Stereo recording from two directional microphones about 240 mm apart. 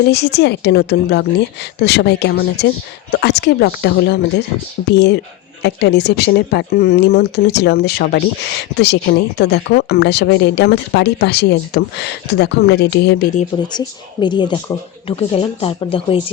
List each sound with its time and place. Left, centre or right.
0.0 s speech: left
13.7 s speech: centre